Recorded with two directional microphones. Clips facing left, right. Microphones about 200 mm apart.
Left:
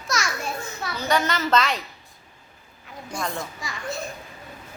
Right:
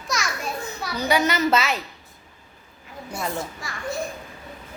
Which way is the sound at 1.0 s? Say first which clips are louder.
Right 3 dB; 15° right (ahead or behind).